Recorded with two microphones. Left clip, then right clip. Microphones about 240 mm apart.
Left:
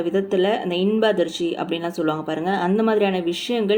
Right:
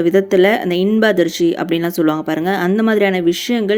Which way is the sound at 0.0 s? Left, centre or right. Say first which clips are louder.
Right 8 dB; right.